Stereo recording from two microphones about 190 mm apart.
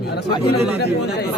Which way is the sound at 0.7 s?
60° left (ahead or behind).